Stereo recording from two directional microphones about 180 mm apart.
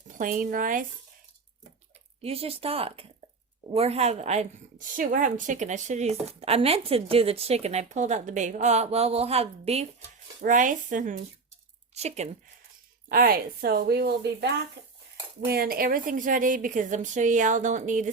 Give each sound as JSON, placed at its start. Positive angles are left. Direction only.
{"t": 0.1, "sound": "a woman's voice", "side_deg": -50}
{"t": 2.2, "sound": "speech", "side_deg": -30}
{"t": 10.4, "sound": "a woman's voice", "side_deg": -45}
{"t": 13.1, "sound": "a woman's voice", "side_deg": -55}